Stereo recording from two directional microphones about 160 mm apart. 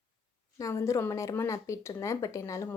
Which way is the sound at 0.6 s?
20° left (ahead or behind).